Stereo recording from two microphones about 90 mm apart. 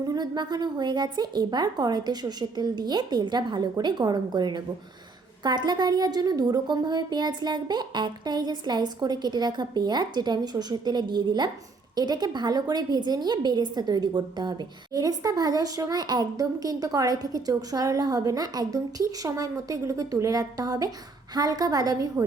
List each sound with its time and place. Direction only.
0.0 s a woman's voice: 45° right (ahead or behind)